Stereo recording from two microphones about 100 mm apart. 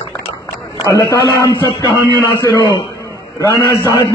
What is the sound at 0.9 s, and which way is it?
Speech, 35° left (ahead or behind).